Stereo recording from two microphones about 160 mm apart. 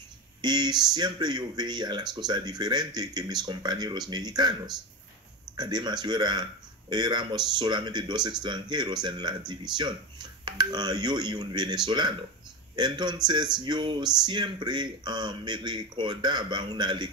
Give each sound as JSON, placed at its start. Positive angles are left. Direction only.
{"t": 0.4, "sound": "speech", "side_deg": -25}